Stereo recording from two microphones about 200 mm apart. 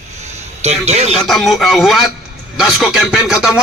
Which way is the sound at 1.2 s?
Centre (ahead or behind).